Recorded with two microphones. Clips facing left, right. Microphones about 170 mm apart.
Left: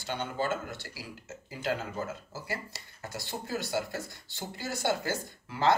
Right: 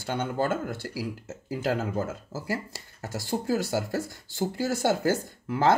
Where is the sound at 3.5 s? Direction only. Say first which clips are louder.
Right 5 dB; 40° right (ahead or behind).